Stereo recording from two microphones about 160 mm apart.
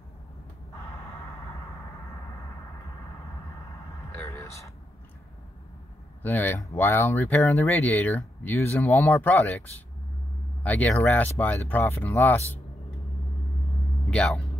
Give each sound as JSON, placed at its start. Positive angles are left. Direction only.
{"t": 4.1, "sound": "vehicle", "side_deg": 15}
{"t": 6.2, "sound": "speech", "side_deg": 10}
{"t": 14.1, "sound": "speech", "side_deg": 5}